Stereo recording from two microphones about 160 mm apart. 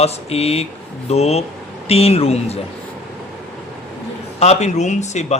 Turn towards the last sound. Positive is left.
turn(degrees=45)  # may be behind; listen again after turning